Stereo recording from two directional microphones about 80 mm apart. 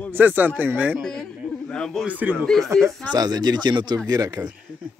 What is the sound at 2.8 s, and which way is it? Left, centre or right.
Speech, right.